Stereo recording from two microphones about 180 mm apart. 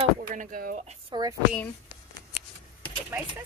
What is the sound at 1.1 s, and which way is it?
Speech, 20° right (ahead or behind).